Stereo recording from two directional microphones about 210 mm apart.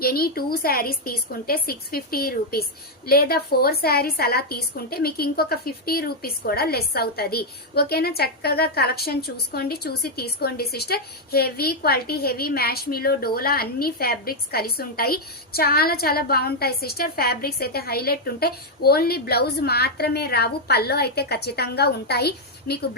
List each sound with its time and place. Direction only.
0.0 s a woman's voice: 45° left (ahead or behind)